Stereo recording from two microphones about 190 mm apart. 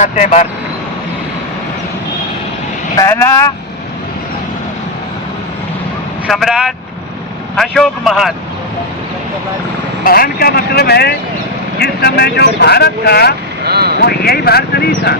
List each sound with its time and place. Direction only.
0.0 s speech: 40° left (ahead or behind)
3.0 s speech: 15° left (ahead or behind)
6.2 s speech: centre (ahead or behind)
10.0 s speech: 50° left (ahead or behind)
13.7 s speech: 55° right (ahead or behind)
14.0 s speech: 55° left (ahead or behind)